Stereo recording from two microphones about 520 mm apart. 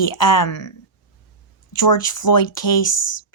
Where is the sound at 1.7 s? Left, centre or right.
Left.